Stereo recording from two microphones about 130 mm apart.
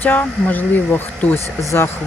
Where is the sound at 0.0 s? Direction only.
15° left (ahead or behind).